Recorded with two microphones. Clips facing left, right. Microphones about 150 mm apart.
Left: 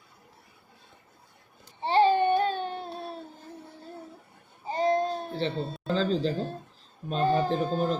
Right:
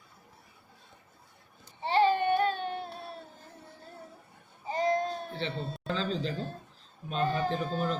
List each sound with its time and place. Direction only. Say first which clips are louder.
1.8 s baby cry: left 3 dB; 30° left (ahead or behind)
4.7 s baby cry: left 3 dB; 30° left (ahead or behind)
7.1 s a man's voice: left 5 dB; 35° left (ahead or behind)